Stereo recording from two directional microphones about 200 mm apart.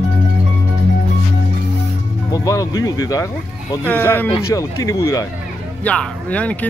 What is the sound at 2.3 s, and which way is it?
Speech, 15° left (ahead or behind).